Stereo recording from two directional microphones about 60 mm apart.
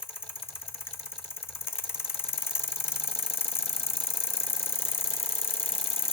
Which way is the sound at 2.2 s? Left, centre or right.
Left.